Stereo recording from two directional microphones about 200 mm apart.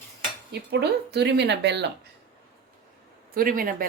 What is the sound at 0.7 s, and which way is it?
Speech, 55° right (ahead or behind).